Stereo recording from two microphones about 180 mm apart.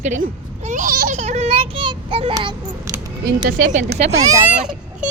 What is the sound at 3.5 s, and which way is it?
Speech, 45° right (ahead or behind).